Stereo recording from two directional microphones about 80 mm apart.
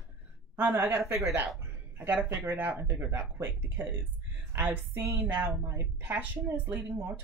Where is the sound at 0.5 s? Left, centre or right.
Right.